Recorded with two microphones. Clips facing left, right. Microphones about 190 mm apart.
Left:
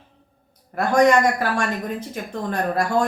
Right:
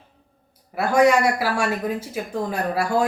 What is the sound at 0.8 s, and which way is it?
Speech, 5° right (ahead or behind).